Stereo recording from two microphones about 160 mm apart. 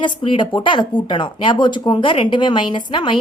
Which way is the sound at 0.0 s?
30° left (ahead or behind).